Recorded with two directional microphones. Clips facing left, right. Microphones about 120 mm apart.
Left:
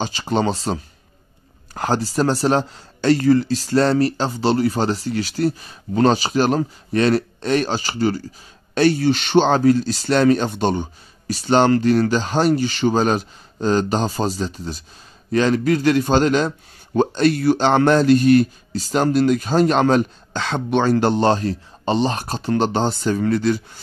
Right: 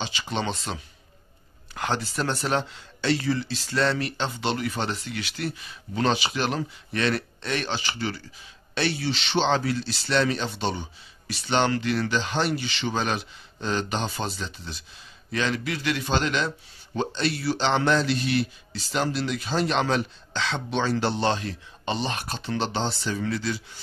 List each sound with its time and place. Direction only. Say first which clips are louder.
0.0 s a man's voice: left 9 dB; 40° left (ahead or behind)